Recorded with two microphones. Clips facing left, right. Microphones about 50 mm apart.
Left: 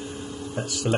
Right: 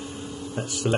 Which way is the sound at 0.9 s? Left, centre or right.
Centre.